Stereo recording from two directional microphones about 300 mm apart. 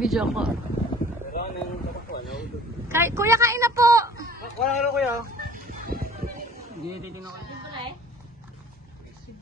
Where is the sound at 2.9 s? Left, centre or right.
Centre.